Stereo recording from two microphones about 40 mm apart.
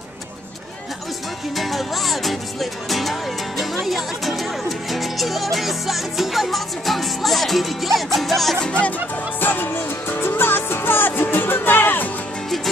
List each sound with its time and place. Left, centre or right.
1.6 s music: centre
9.4 s music: left